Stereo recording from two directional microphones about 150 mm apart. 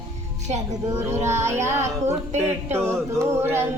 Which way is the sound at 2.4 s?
15° right (ahead or behind).